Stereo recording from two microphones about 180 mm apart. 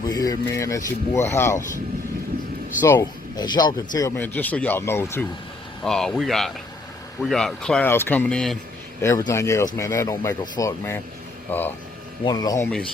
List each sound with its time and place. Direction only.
0.0 s speech: 20° left (ahead or behind)
2.8 s speech: 15° left (ahead or behind)
5.8 s speech: 5° left (ahead or behind)
9.0 s speech: 15° left (ahead or behind)
12.2 s speech: 20° left (ahead or behind)
12.6 s speech: 5° left (ahead or behind)